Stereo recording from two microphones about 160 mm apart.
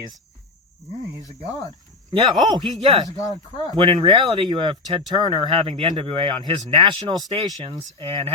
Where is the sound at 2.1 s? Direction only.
30° right (ahead or behind).